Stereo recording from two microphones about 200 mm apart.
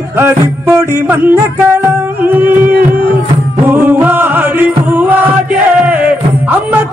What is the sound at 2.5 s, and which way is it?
Music, 45° right (ahead or behind).